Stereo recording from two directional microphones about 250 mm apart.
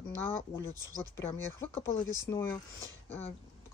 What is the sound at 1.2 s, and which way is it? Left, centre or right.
Speech, centre.